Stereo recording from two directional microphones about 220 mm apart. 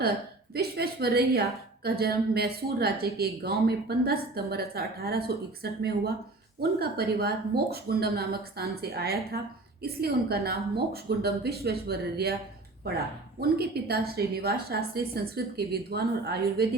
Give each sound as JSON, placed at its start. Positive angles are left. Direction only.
{"t": 0.5, "sound": "a woman's voice", "side_deg": -45}
{"t": 13.4, "sound": "a woman's voice", "side_deg": -45}